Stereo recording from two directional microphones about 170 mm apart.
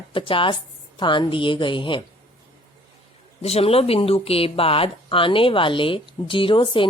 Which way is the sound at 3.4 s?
35° left (ahead or behind).